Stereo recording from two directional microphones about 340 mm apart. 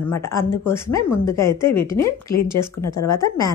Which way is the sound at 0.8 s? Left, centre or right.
Left.